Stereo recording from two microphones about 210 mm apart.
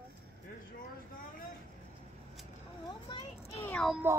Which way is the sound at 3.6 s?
5° left (ahead or behind).